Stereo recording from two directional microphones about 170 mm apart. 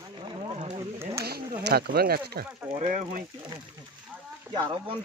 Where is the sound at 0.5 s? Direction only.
35° right (ahead or behind).